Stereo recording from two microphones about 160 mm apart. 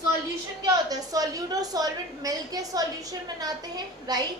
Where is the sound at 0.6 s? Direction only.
25° right (ahead or behind).